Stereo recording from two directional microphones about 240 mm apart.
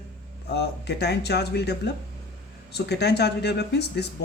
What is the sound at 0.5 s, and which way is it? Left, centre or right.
Speech, left.